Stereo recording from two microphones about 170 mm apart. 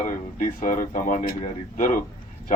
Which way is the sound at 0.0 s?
50° left (ahead or behind).